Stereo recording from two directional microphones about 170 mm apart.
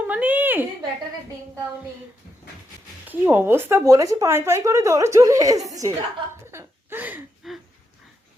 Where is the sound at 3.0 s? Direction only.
10° right (ahead or behind).